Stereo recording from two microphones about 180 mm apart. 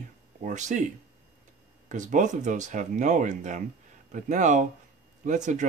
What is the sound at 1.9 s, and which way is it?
Speech, 45° right (ahead or behind).